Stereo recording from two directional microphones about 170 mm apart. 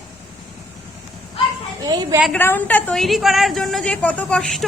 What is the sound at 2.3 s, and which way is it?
A woman's voice, 10° left (ahead or behind).